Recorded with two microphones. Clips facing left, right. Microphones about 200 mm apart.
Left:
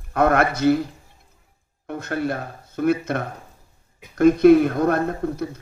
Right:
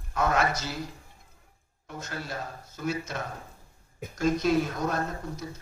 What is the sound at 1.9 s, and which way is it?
Speech, 60° left (ahead or behind).